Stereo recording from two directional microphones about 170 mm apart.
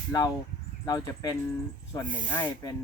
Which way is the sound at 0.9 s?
20° left (ahead or behind).